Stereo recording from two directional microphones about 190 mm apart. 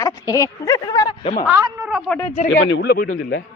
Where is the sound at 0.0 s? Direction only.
15° left (ahead or behind).